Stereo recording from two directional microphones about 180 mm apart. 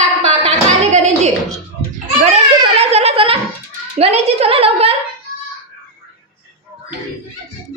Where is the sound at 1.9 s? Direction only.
40° right (ahead or behind).